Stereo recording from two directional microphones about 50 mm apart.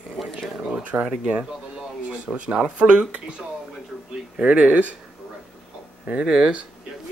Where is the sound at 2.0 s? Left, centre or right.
Right.